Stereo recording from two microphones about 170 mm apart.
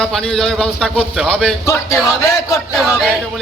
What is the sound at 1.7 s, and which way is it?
Speech, 15° left (ahead or behind).